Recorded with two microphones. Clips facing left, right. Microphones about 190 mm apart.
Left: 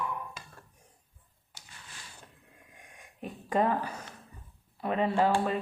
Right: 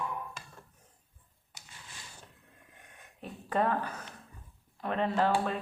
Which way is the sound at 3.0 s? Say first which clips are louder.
Left 3 dB; 10° left (ahead or behind).